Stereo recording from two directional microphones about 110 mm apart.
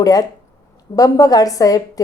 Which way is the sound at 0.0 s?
35° left (ahead or behind).